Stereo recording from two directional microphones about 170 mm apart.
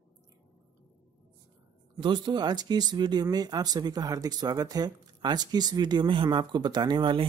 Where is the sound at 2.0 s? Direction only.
25° right (ahead or behind).